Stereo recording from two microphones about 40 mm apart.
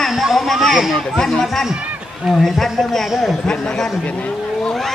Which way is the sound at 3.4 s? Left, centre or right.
Centre.